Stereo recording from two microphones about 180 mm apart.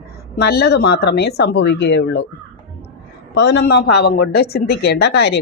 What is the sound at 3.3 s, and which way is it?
A woman's voice, 70° left (ahead or behind).